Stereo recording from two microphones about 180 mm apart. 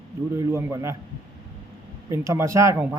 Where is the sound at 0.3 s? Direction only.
15° right (ahead or behind).